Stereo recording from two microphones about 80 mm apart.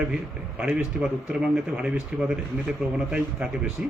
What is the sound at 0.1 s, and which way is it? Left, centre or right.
Speech, centre.